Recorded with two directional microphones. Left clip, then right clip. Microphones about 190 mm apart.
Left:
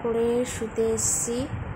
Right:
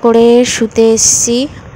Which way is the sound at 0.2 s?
45° right (ahead or behind).